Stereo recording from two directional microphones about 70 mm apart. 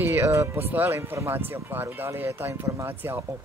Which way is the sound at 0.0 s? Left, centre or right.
Right.